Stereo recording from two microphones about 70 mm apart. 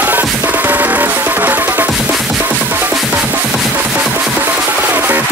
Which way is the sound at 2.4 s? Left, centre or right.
Right.